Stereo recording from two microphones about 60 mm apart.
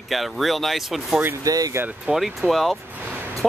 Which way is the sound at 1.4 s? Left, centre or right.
Right.